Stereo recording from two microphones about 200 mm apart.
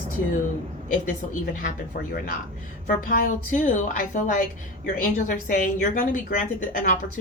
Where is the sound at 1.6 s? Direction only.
45° left (ahead or behind).